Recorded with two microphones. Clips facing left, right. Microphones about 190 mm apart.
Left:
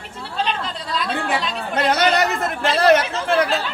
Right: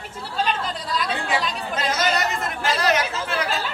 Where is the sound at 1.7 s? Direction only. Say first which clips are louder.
Left 6 dB; 60° left (ahead or behind).